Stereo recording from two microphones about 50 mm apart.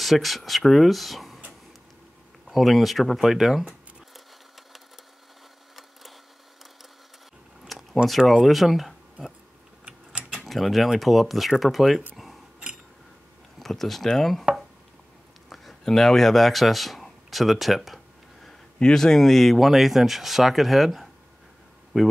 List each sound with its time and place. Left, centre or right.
0.0 s speech: centre
2.4 s speech: centre
7.6 s a sound: centre
8.3 s speech: centre
9.8 s typing: right
10.4 s speech: centre
13.6 s speech: centre
15.5 s a sound: centre
18.8 s speech: centre